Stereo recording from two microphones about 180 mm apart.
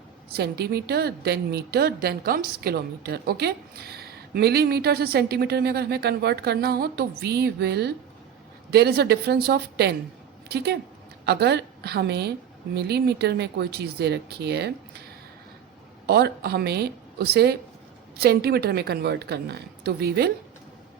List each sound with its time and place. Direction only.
0.3 s a woman's voice: 65° right (ahead or behind)
16.0 s a woman's voice: 65° right (ahead or behind)